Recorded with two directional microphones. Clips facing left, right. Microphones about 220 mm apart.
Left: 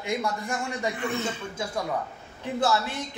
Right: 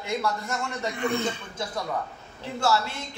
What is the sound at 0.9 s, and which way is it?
Speech, 5° left (ahead or behind).